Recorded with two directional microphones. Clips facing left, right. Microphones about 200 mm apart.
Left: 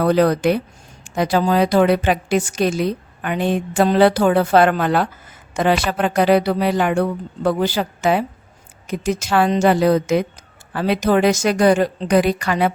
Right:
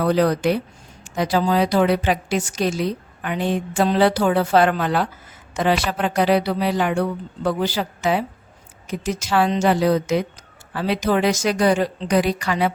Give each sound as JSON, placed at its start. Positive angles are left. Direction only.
{"t": 0.0, "sound": "a woman's voice", "side_deg": 55}